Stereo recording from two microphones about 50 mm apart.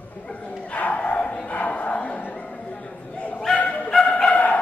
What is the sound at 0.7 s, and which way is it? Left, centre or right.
Bow-wow, left.